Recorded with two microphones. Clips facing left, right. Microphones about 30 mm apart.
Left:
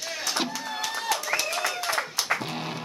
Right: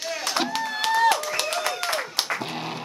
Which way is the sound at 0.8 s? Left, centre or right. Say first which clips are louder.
Right 9 dB; right.